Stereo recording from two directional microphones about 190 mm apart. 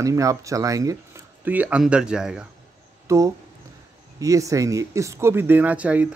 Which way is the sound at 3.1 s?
15° right (ahead or behind).